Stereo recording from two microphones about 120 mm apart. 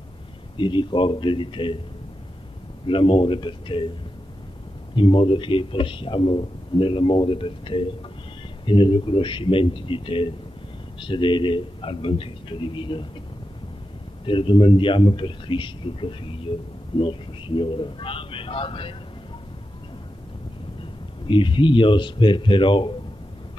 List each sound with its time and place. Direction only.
0.6 s a man's voice: 40° left (ahead or behind)
2.9 s a man's voice: 45° left (ahead or behind)
4.9 s a man's voice: 45° left (ahead or behind)
14.2 s a man's voice: 45° left (ahead or behind)
20.8 s speech: 45° left (ahead or behind)